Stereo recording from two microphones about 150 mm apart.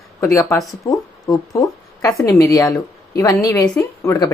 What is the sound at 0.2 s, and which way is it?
Speech, 20° left (ahead or behind).